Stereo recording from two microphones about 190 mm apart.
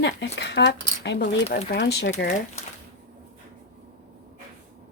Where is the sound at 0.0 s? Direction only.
65° left (ahead or behind).